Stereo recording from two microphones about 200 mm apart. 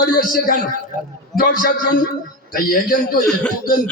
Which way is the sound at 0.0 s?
45° left (ahead or behind).